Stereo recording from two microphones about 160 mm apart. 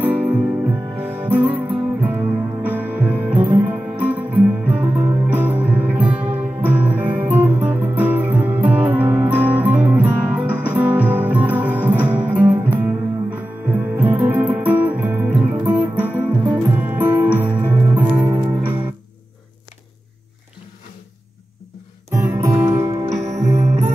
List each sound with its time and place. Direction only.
0.0 s music: 10° right (ahead or behind)
18.3 s music: 30° right (ahead or behind)
22.1 s music: 20° right (ahead or behind)